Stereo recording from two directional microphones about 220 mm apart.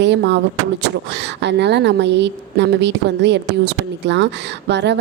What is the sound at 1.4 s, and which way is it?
Speech, 50° right (ahead or behind).